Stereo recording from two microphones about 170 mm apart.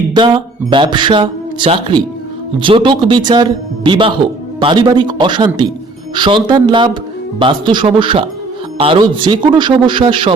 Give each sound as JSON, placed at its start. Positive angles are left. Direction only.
{"t": 0.1, "sound": "a man's voice", "side_deg": -30}